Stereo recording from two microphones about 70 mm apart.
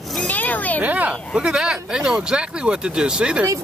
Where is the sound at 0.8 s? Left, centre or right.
Right.